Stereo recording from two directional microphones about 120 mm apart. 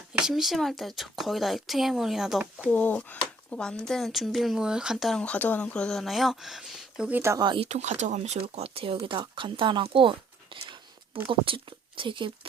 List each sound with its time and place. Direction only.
0.1 s speech: 5° right (ahead or behind)
2.6 s speech: 15° left (ahead or behind); by 5.2 s centre (ahead or behind)
5.2 s speech: 15° left (ahead or behind); by 7.2 s 5° right (ahead or behind)
7.2 s speech: 20° right (ahead or behind)
7.4 s speech: 45° right (ahead or behind)
7.7 s speech: 70° right (ahead or behind); by 12.3 s 40° right (ahead or behind)